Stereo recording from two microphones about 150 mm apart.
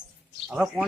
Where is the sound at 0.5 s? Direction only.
5° right (ahead or behind).